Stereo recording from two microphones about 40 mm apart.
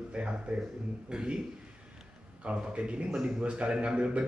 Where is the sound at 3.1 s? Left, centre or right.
Centre.